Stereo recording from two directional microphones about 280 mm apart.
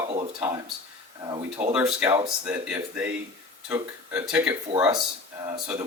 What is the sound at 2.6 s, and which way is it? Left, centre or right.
Speech, centre.